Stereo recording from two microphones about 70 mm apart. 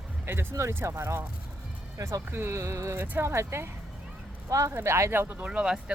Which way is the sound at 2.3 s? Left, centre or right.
Right.